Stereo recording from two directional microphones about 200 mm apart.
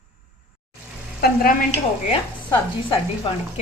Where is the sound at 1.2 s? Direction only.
50° left (ahead or behind).